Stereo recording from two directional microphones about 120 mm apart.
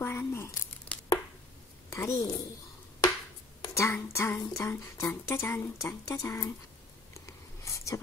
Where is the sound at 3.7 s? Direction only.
25° left (ahead or behind).